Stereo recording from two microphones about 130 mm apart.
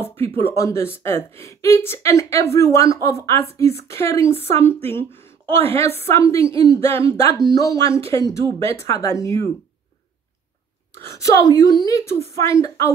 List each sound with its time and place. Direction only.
0.4 s a woman's voice: 20° left (ahead or behind)
11.0 s a woman's voice: 25° left (ahead or behind)